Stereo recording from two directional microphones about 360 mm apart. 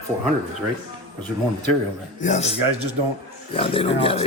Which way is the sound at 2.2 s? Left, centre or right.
Centre.